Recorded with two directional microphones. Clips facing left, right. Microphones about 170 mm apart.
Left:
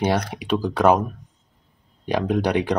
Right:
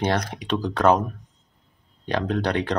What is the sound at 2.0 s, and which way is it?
Speech, 10° left (ahead or behind).